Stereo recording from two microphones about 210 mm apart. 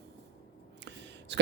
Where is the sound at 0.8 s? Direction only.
55° right (ahead or behind).